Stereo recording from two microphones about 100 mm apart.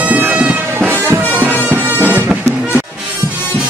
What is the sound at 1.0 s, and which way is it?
Music, 25° right (ahead or behind).